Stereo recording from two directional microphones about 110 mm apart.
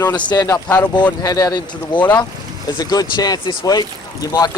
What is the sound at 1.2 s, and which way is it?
Speech, 30° left (ahead or behind).